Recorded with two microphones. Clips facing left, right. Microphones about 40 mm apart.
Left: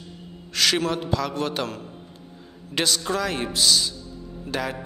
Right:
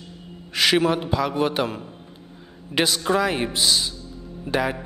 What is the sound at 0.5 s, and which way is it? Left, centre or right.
A man's voice, centre.